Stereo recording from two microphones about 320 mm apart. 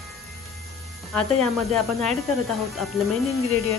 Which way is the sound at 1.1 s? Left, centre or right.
Centre.